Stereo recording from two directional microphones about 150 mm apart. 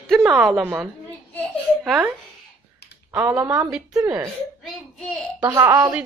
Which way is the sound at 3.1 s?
15° right (ahead or behind).